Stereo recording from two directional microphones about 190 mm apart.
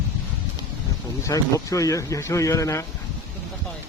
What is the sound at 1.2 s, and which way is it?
Speech, 15° left (ahead or behind).